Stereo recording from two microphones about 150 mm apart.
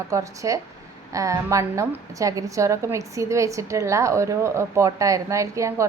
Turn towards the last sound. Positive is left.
turn(degrees=-20)  # may be behind; listen again after turning